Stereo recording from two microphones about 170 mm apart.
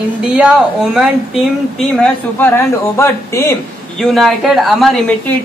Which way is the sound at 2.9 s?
15° left (ahead or behind).